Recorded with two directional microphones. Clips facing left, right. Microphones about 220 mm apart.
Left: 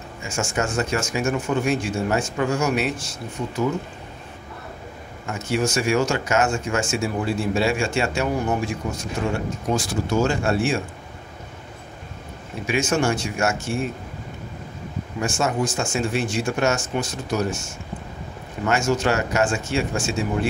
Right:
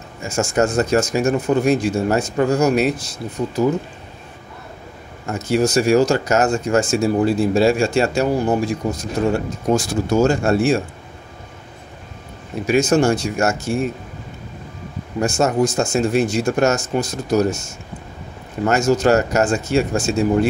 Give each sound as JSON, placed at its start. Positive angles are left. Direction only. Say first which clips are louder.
{"t": 0.2, "sound": "speech", "louder": "right 7 dB", "side_deg": -40}
{"t": 5.2, "sound": "speech", "louder": "right 5 dB", "side_deg": -40}
{"t": 12.6, "sound": "speech", "louder": "right 6 dB", "side_deg": -40}
{"t": 15.1, "sound": "speech", "louder": "right 6 dB", "side_deg": -40}
{"t": 18.7, "sound": "speech", "louder": "right 6 dB", "side_deg": -40}